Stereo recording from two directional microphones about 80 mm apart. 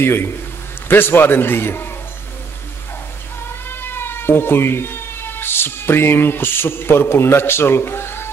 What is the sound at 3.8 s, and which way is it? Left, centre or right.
Speech, left.